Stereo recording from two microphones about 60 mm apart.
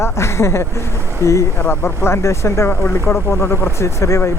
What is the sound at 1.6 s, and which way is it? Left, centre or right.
Speech, left.